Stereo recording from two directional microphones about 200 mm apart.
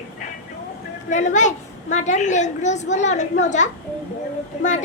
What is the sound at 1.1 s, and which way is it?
A woman's voice, 35° left (ahead or behind).